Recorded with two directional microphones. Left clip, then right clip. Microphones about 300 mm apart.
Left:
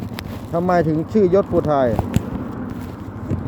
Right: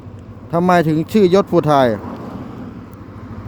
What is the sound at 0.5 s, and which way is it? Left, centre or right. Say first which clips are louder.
Speech: right 4 dB; right.